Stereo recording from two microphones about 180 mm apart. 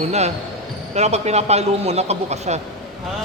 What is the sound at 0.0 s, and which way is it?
Speech, 35° right (ahead or behind).